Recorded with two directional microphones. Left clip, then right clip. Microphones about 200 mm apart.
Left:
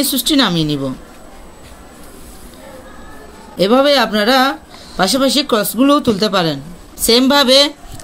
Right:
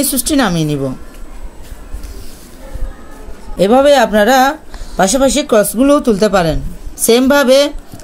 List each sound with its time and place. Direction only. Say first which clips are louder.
0.0 s speech: even; 35° right (ahead or behind)
3.6 s speech: right 3 dB; 30° right (ahead or behind)